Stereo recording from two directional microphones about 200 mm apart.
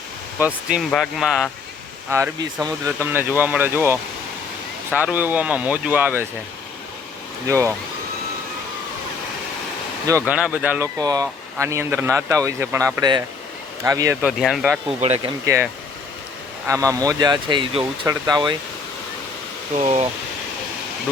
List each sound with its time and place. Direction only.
0.3 s speech: 5° right (ahead or behind)
2.0 s speech: 15° right (ahead or behind)
7.4 s speech: 15° right (ahead or behind)
10.2 s speech: 5° right (ahead or behind)
14.8 s speech: 30° right (ahead or behind)
15.4 s speech: 15° right (ahead or behind)
19.8 s speech: 30° right (ahead or behind)